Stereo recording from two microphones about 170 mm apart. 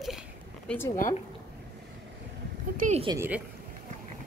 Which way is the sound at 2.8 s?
45° right (ahead or behind).